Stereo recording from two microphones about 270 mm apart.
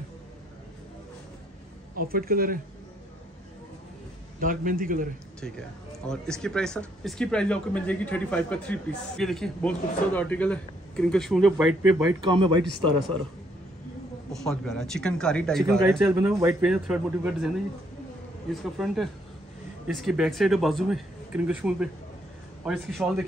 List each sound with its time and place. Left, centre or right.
2.0 s speech: right
4.4 s speech: right
6.0 s speech: centre
12.2 s speech: centre
14.3 s speech: centre
16.1 s speech: centre
18.5 s speech: centre